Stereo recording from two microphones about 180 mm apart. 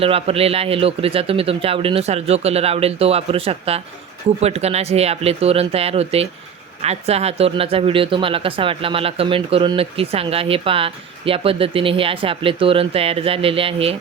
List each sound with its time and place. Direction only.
0.0 s speech: 35° right (ahead or behind)